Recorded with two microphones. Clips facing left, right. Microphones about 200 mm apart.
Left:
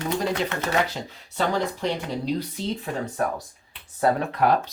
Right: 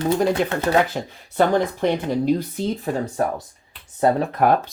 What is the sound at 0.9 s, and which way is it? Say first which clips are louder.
Speech: right 6 dB; 55° right (ahead or behind).